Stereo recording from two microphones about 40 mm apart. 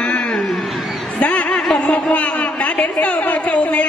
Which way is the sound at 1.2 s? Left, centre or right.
Left.